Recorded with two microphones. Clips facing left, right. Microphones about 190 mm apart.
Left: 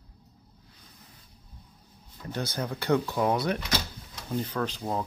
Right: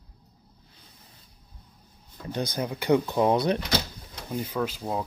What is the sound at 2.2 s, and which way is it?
Speech, 15° right (ahead or behind).